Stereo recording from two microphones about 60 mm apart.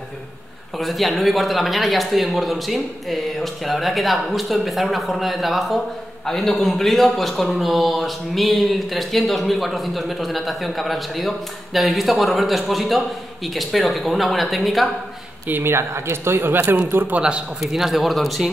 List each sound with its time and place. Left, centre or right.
0.7 s speech: centre
15.4 s speech: right
17.2 s a man's voice: centre
17.7 s speech: centre